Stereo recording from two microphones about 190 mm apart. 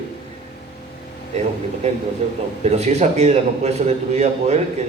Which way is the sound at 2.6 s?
35° right (ahead or behind).